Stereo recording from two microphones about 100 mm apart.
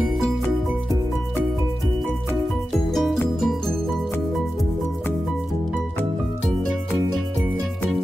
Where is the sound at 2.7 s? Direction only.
Centre (ahead or behind).